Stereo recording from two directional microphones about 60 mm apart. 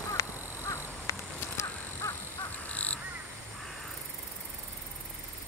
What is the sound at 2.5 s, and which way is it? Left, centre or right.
Crow, left.